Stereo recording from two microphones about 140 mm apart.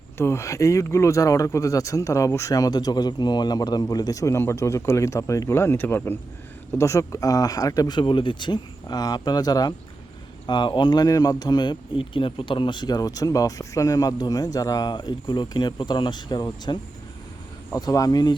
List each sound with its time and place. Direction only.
0.2 s speech: 20° left (ahead or behind)
17.7 s speech: 25° left (ahead or behind)